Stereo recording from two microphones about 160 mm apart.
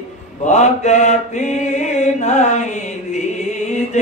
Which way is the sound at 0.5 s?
45° left (ahead or behind).